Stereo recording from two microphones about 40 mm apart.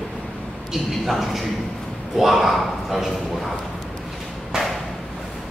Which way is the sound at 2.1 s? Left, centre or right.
Centre.